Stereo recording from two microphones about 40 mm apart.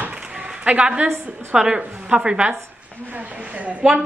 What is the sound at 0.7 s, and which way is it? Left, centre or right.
A woman's voice, right.